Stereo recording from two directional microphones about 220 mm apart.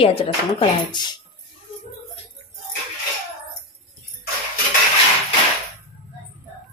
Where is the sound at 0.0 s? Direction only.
25° left (ahead or behind).